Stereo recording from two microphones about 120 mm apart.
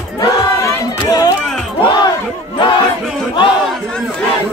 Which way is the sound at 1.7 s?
40° left (ahead or behind).